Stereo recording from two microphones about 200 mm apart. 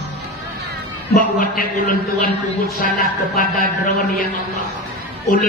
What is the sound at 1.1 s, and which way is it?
Speech, 45° left (ahead or behind).